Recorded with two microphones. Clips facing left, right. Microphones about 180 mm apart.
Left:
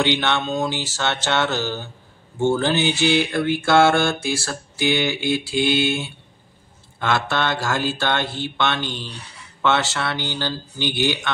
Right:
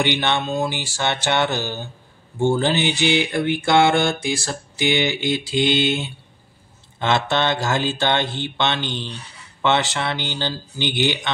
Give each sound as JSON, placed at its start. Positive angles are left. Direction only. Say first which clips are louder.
{"t": 0.0, "sound": "mantra", "louder": "even", "side_deg": -15}
{"t": 7.0, "sound": "speech", "louder": "right 2 dB", "side_deg": -20}
{"t": 9.6, "sound": "mantra", "louder": "right 1 dB", "side_deg": -15}